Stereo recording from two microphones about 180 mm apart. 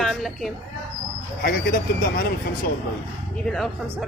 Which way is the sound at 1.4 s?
55° left (ahead or behind).